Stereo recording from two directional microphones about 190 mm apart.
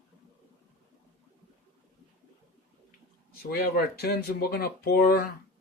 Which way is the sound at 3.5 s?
55° left (ahead or behind).